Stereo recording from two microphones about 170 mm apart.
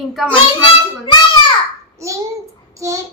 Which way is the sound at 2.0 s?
15° right (ahead or behind).